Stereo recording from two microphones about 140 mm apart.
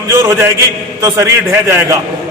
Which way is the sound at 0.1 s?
20° right (ahead or behind).